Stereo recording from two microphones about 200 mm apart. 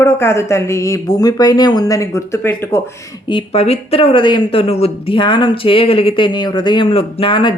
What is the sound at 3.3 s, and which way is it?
Speech, 30° left (ahead or behind).